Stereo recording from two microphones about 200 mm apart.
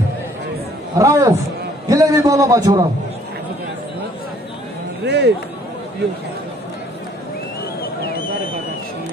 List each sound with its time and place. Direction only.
0.9 s a man's voice: 15° right (ahead or behind)
5.0 s speech: 55° right (ahead or behind)
7.8 s a sound: 50° left (ahead or behind)